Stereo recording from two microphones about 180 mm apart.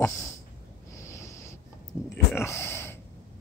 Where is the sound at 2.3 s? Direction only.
15° left (ahead or behind).